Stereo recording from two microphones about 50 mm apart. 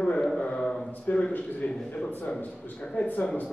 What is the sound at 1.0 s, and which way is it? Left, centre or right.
A man's voice, left.